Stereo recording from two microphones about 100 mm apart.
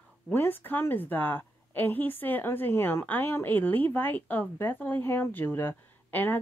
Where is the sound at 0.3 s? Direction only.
20° left (ahead or behind).